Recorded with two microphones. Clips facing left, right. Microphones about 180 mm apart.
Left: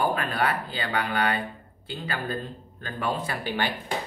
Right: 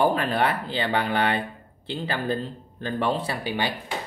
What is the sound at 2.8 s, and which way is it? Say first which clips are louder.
Speech: right 4 dB; 30° right (ahead or behind).